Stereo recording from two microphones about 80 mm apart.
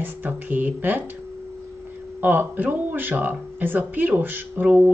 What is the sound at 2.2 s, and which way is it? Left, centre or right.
Speech, right.